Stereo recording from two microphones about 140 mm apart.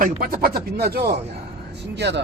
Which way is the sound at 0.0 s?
90° right.